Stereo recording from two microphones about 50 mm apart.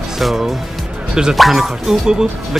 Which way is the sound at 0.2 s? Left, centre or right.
Centre.